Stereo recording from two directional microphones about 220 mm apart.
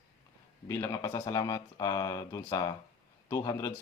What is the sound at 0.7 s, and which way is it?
Speech, 15° left (ahead or behind).